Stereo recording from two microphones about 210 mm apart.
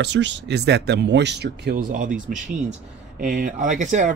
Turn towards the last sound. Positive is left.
turn(degrees=-35)  # may be behind; listen again after turning